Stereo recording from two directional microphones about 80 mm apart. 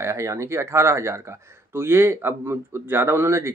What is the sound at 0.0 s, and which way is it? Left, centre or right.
A man's voice, right.